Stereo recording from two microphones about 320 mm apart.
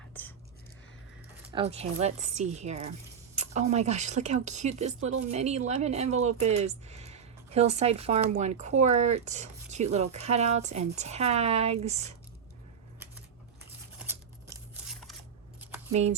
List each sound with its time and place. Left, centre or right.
0.1 s whispering: centre
1.5 s speech: centre
14.0 s a sound: centre
15.9 s speech: centre